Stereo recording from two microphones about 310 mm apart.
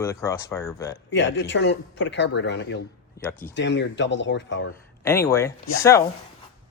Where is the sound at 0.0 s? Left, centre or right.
Centre.